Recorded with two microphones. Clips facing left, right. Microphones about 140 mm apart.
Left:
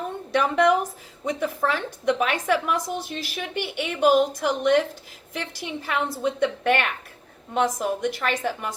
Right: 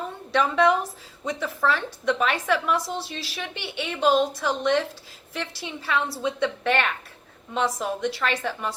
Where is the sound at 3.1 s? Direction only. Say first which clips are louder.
Left 3 dB; 50° left (ahead or behind).